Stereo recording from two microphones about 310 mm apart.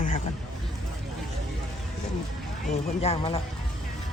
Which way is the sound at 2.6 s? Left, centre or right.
Left.